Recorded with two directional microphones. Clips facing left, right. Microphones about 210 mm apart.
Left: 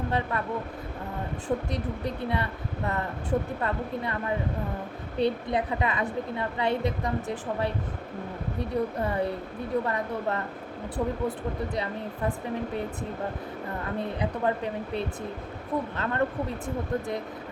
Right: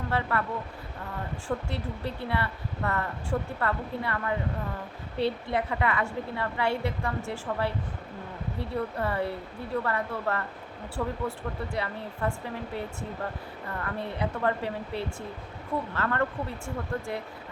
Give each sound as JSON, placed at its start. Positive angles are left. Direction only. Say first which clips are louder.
{"t": 0.1, "sound": "speech", "louder": "right 3 dB", "side_deg": 20}
{"t": 1.5, "sound": "speech", "louder": "left 3 dB", "side_deg": 15}
{"t": 8.5, "sound": "speech", "louder": "left 3 dB", "side_deg": 20}
{"t": 13.8, "sound": "speech", "louder": "left 1 dB", "side_deg": 15}